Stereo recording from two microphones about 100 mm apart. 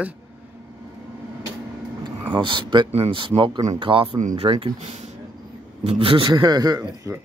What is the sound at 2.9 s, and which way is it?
Speech, 85° right.